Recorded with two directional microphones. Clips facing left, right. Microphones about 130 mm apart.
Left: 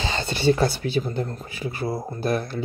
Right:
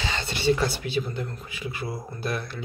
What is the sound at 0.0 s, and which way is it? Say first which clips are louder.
Speech: left 4 dB; 40° left (ahead or behind).